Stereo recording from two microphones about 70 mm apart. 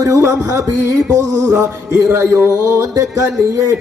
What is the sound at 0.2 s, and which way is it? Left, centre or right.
Male singing, right.